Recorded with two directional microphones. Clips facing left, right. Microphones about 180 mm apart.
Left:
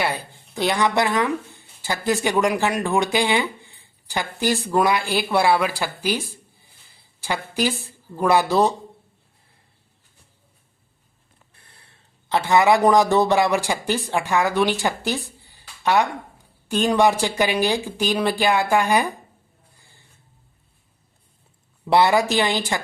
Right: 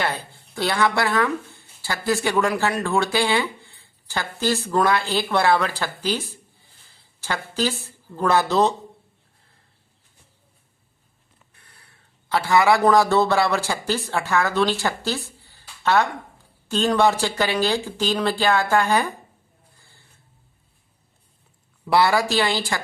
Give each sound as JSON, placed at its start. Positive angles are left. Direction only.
{"t": 0.0, "sound": "speech", "side_deg": 10}
{"t": 6.9, "sound": "a sound", "side_deg": 15}
{"t": 8.1, "sound": "speech", "side_deg": 10}
{"t": 11.5, "sound": "speech", "side_deg": 25}
{"t": 21.8, "sound": "speech", "side_deg": 20}